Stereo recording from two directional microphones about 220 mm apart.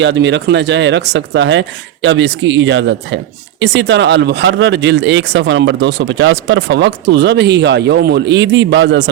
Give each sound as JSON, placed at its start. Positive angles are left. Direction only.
{"t": 0.0, "sound": "speech", "side_deg": -55}